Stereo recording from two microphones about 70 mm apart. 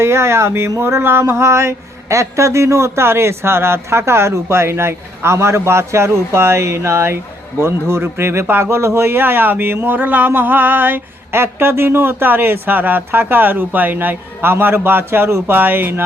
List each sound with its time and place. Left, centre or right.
0.0 s speech: right